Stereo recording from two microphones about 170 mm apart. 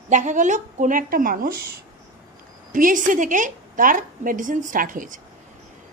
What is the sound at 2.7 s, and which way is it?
A woman's voice, 50° right (ahead or behind).